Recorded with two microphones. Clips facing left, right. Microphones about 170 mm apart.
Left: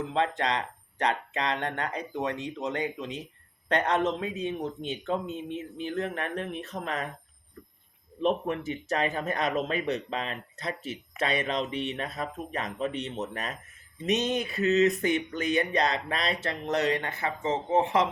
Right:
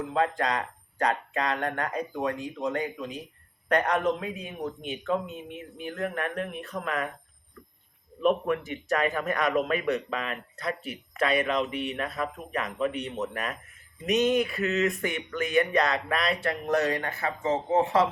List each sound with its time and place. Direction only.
0.1 s a man's voice: 25° left (ahead or behind)
8.2 s a man's voice: 30° left (ahead or behind)
14.8 s a sound: 35° left (ahead or behind)
15.4 s a man's voice: 35° left (ahead or behind); by 18.0 s 20° left (ahead or behind)